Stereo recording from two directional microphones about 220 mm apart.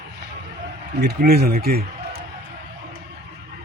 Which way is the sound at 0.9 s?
45° right (ahead or behind).